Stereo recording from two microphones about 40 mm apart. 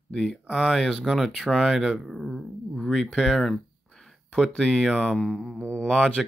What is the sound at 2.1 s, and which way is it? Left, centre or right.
Speech, centre.